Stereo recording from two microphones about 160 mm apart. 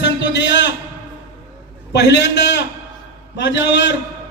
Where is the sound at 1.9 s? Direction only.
90° left.